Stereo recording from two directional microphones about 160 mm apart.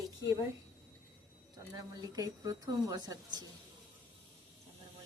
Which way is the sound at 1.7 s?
25° right (ahead or behind).